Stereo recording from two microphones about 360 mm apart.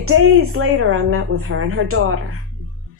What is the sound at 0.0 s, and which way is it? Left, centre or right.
A woman's voice, right.